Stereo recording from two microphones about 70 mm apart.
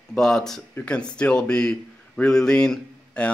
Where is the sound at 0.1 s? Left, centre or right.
Centre.